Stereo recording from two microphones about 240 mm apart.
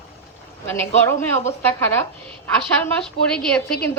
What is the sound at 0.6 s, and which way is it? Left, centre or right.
A woman's voice, centre.